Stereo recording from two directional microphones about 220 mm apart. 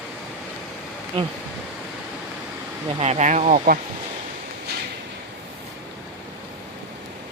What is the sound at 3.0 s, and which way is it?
Speech, 30° right (ahead or behind).